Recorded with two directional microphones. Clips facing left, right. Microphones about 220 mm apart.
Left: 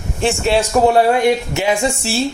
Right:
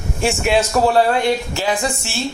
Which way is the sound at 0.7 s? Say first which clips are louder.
Left 5 dB; 20° left (ahead or behind).